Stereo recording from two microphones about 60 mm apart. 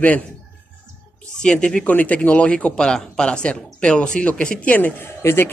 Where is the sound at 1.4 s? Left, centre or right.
Centre.